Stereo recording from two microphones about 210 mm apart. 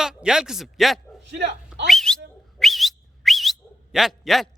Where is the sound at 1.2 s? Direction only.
55° right (ahead or behind).